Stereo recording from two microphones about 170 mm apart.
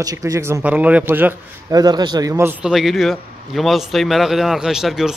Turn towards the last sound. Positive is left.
turn(degrees=-5)  # may be behind; listen again after turning